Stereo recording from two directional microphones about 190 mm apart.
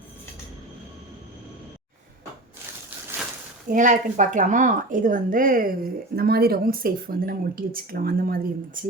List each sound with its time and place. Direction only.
3.7 s speech: 40° right (ahead or behind)